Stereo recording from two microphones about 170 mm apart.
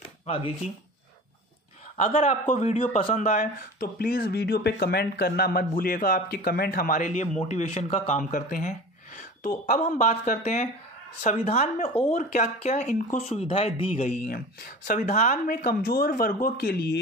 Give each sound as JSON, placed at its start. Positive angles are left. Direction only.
{"t": 2.0, "sound": "a man's voice", "side_deg": 45}
{"t": 3.2, "sound": "speech", "side_deg": 50}
{"t": 14.2, "sound": "speech", "side_deg": 60}